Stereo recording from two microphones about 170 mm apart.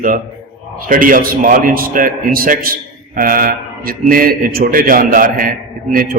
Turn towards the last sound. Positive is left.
turn(degrees=-55)  # may be behind; listen again after turning